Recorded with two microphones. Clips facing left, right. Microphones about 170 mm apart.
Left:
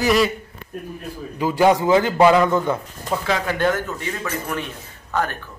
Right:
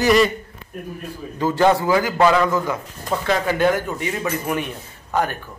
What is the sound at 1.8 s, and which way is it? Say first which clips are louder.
Speech: left 2 dB; 25° left (ahead or behind).